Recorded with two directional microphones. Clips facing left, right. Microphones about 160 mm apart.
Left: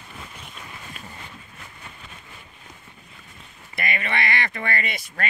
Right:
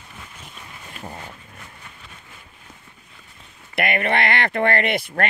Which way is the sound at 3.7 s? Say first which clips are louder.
Right 7 dB; 60° right (ahead or behind).